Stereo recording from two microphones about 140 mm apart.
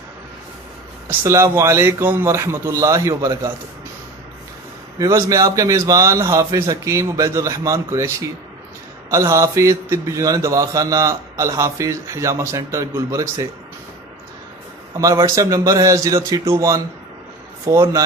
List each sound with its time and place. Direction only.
1.2 s mantra: 20° right (ahead or behind)
4.9 s mantra: 25° right (ahead or behind)
14.9 s mantra: 25° right (ahead or behind)